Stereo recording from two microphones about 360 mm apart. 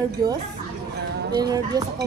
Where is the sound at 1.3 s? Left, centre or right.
Centre.